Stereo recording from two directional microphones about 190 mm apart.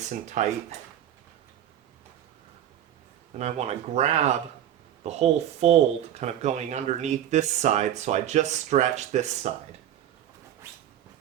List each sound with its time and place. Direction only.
0.0 s speech: 40° right (ahead or behind)
3.3 s speech: 35° right (ahead or behind)